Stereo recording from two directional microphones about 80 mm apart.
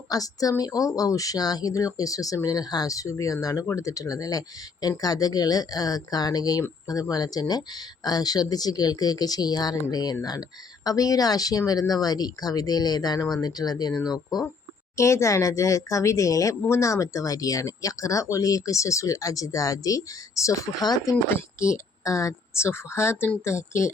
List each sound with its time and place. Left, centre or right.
0.1 s speech: left
14.9 s speech: left
20.8 s speech: left
21.2 s speech: left